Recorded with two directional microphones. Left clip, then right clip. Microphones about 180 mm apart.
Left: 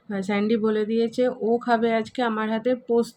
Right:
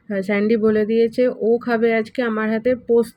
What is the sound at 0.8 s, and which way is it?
Speech, 30° left (ahead or behind).